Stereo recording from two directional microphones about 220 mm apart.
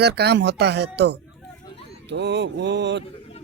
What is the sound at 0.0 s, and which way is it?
Speech, 50° right (ahead or behind).